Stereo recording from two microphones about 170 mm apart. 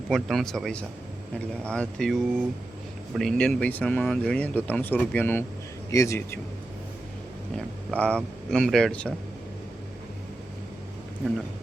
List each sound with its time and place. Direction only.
0.1 s a man's voice: centre (ahead or behind)
7.5 s a man's voice: 5° left (ahead or behind)